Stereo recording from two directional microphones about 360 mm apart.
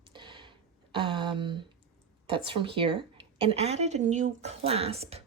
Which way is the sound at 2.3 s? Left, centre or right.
Centre.